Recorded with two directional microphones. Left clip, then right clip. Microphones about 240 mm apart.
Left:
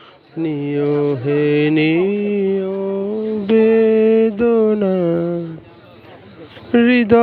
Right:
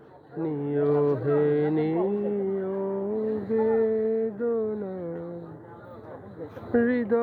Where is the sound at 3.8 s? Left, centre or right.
Left.